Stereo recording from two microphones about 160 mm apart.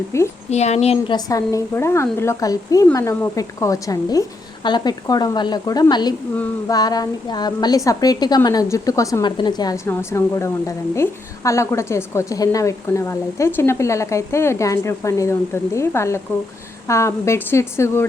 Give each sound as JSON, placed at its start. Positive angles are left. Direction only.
{"t": 0.1, "sound": "a woman's voice", "side_deg": 15}
{"t": 0.5, "sound": "speech", "side_deg": 45}
{"t": 1.1, "sound": "a woman's voice", "side_deg": 20}